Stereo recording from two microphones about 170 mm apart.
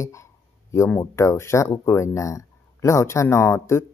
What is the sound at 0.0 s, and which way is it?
Speech, 15° left (ahead or behind).